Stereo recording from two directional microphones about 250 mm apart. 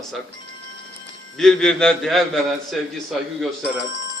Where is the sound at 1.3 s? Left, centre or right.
Centre.